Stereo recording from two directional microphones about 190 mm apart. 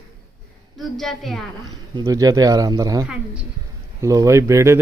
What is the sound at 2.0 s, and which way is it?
Speech, 20° right (ahead or behind).